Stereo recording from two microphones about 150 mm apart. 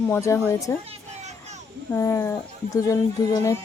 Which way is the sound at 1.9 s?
20° left (ahead or behind).